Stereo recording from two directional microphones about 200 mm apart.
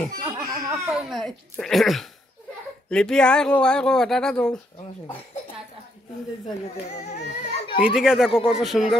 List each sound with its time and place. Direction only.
0.2 s a sound: 15° right (ahead or behind)
0.9 s speech: centre (ahead or behind)
6.9 s speech: 35° left (ahead or behind)
7.8 s speech: 5° right (ahead or behind)